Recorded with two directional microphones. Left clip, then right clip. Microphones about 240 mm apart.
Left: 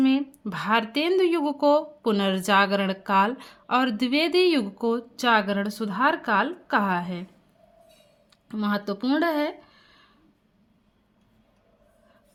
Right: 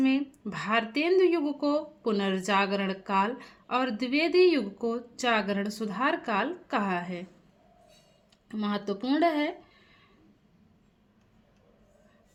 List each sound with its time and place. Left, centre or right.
0.0 s speech: left
8.4 s speech: left